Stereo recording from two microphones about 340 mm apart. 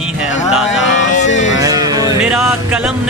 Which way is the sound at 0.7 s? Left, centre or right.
Left.